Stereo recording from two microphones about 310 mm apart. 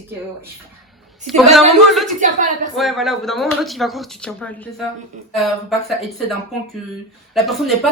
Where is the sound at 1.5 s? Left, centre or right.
Centre.